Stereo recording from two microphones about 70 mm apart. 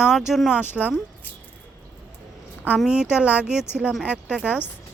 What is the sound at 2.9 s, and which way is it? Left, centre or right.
Speech, centre.